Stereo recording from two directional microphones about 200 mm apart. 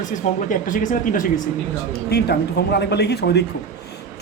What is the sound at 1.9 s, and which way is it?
Speech, 55° left (ahead or behind).